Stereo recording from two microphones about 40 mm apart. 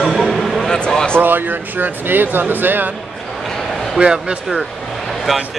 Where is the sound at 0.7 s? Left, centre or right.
Centre.